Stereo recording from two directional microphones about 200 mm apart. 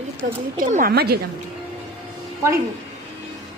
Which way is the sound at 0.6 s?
40° right (ahead or behind).